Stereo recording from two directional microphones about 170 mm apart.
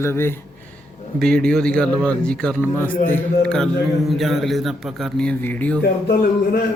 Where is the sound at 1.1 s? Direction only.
5° left (ahead or behind).